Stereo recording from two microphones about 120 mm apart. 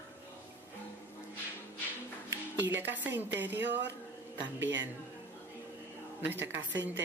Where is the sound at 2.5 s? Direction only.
15° right (ahead or behind).